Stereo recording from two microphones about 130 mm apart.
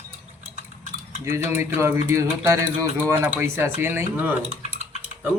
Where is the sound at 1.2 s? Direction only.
20° right (ahead or behind).